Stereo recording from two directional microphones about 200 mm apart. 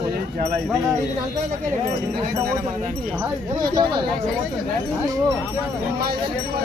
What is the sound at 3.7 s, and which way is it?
Speech, 20° right (ahead or behind).